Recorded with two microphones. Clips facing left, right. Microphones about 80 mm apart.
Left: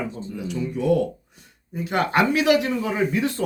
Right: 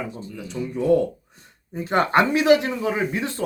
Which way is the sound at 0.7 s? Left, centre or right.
Right.